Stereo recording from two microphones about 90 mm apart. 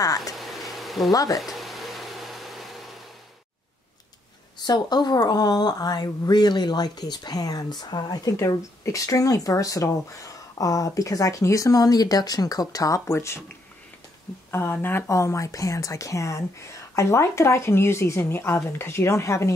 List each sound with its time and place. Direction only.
0.0 s speech: 40° left (ahead or behind)
0.4 s a sound: centre (ahead or behind)
1.1 s speech: 40° left (ahead or behind)
1.4 s a sound: centre (ahead or behind)
4.6 s speech: 50° left (ahead or behind); by 13.4 s 30° left (ahead or behind)
14.5 s speech: 25° left (ahead or behind)